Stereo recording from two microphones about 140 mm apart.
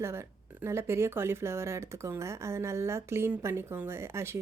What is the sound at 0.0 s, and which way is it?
Speech, 20° right (ahead or behind).